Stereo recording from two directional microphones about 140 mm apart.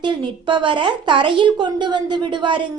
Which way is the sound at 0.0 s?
35° right (ahead or behind).